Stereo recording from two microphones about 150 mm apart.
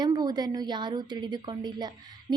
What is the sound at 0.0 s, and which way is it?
A woman's voice, 25° right (ahead or behind).